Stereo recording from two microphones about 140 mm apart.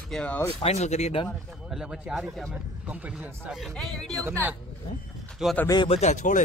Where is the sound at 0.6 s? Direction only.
55° left (ahead or behind).